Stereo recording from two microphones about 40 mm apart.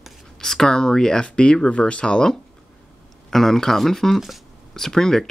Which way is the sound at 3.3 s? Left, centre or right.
Centre.